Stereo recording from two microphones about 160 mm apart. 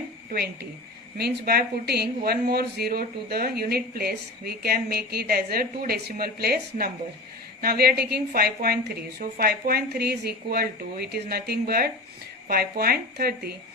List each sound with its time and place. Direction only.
0.3 s speech: 75° right (ahead or behind)